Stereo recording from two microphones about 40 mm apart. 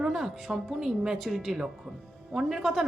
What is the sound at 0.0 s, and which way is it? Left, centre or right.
Speech, centre.